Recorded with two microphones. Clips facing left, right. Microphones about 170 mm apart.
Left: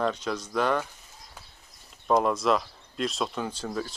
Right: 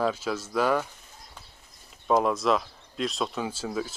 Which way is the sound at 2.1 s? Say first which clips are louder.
Even; centre (ahead or behind).